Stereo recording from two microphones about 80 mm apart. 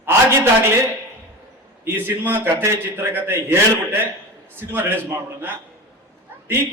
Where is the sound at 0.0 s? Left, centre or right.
Right.